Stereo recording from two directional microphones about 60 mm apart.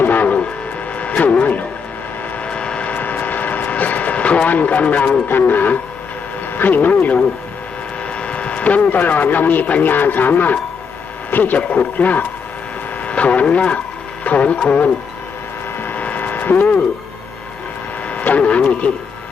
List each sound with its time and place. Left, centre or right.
0.0 s train: left
0.9 s vehicle: left
6.6 s a man's voice: left
8.2 s a man's voice: left
15.8 s vehicle: left
18.1 s speech: left